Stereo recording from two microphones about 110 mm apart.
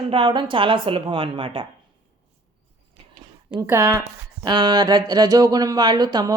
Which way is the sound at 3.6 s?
25° right (ahead or behind).